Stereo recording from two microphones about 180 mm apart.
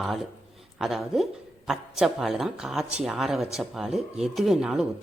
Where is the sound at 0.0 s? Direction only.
Centre (ahead or behind).